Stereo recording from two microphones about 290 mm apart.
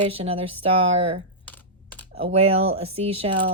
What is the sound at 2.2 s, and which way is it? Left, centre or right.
Speech, right.